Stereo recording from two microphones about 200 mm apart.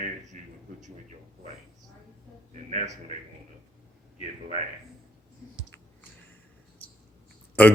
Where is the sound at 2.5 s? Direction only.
35° right (ahead or behind).